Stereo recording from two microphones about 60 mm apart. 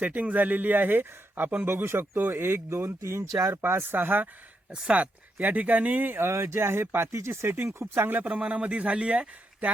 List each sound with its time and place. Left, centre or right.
0.0 s speech: right
4.7 s speech: centre
6.1 s speech: right
8.2 s speech: centre